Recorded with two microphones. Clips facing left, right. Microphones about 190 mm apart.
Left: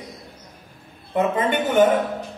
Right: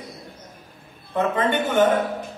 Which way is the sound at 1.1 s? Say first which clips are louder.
Left 1 dB; 15° left (ahead or behind).